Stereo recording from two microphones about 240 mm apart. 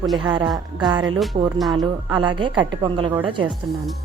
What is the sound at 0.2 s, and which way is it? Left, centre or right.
Speech, centre.